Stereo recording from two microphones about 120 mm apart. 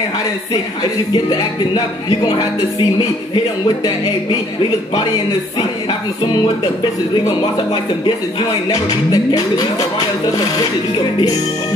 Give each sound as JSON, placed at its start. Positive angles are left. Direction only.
{"t": 1.1, "sound": "speech", "side_deg": 35}
{"t": 6.8, "sound": "speech", "side_deg": 40}